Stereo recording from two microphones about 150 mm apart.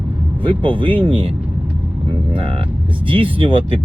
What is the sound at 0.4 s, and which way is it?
Speech, 35° right (ahead or behind).